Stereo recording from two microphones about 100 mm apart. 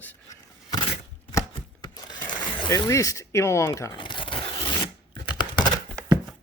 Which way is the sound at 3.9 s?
55° left (ahead or behind).